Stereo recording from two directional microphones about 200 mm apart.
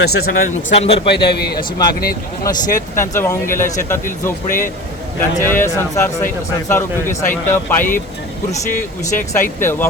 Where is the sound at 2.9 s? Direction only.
15° left (ahead or behind).